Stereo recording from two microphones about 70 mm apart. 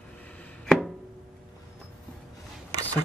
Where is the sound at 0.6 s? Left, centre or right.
Centre.